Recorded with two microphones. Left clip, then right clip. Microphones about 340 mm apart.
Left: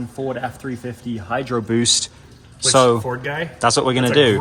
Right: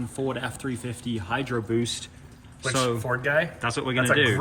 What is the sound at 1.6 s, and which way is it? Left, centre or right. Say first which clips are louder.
Speech: left 10 dB; left.